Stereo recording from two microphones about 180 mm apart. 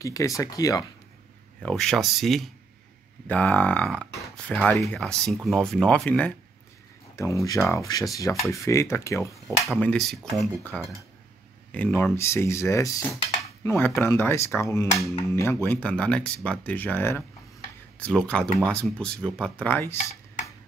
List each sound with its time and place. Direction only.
0.0 s speech: 20° left (ahead or behind)
1.6 s speech: 5° left (ahead or behind)
9.3 s speech: 5° left (ahead or behind)